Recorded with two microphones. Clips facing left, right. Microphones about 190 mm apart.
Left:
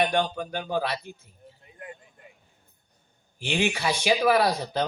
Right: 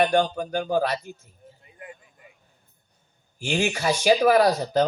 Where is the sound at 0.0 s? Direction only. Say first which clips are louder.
Right 4 dB; 40° right (ahead or behind).